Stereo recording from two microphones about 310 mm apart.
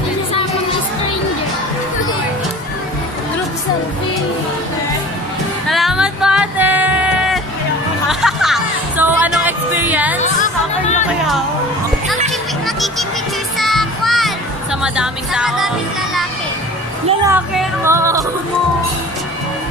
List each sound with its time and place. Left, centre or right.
5.7 s music: centre
10.2 s music: left
11.1 s speech: centre
13.6 s music: centre
17.3 s music: centre